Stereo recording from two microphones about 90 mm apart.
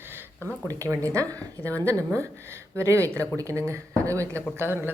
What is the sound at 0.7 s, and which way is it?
A woman's voice, 35° right (ahead or behind).